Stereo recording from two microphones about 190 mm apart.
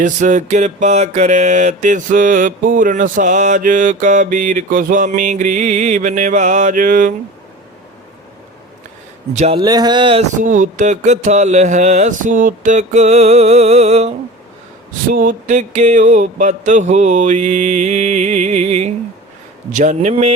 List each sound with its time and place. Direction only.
0.0 s mantra: 40° right (ahead or behind)
9.3 s mantra: 35° right (ahead or behind)
9.6 s speech: 20° right (ahead or behind)
10.3 s mantra: 45° right (ahead or behind)
15.1 s mantra: 45° right (ahead or behind)